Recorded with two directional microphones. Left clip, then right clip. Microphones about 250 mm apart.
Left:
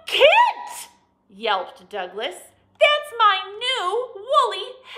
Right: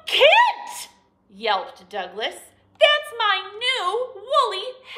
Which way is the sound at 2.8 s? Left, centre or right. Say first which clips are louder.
Left 1 dB; centre.